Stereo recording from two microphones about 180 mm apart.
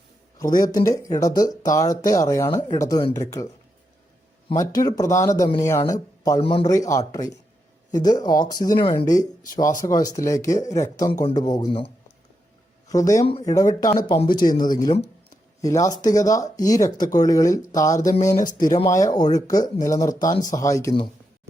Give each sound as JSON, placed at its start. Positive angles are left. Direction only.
{"t": 0.5, "sound": "speech", "side_deg": 50}
{"t": 0.9, "sound": "speech", "side_deg": 20}
{"t": 4.5, "sound": "speech", "side_deg": 20}
{"t": 6.4, "sound": "speech", "side_deg": 30}
{"t": 6.7, "sound": "speech", "side_deg": 15}
{"t": 12.9, "sound": "speech", "side_deg": 20}
{"t": 14.4, "sound": "speech", "side_deg": 50}
{"t": 14.7, "sound": "speech", "side_deg": 20}